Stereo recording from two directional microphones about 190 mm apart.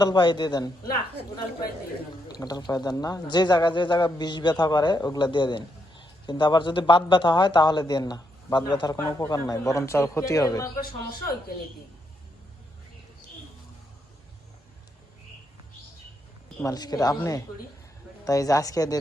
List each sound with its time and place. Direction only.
0.0 s speech: 20° left (ahead or behind)
2.4 s speech: 20° left (ahead or behind)
16.6 s speech: 20° left (ahead or behind)